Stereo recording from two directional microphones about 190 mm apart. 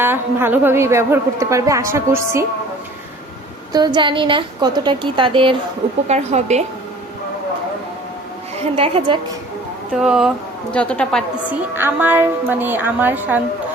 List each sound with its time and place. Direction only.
0.0 s a woman's voice: 10° right (ahead or behind)
3.7 s a woman's voice: 20° right (ahead or behind)
8.7 s a woman's voice: 25° right (ahead or behind)
9.9 s a woman's voice: 5° right (ahead or behind)
11.4 s a woman's voice: 10° right (ahead or behind)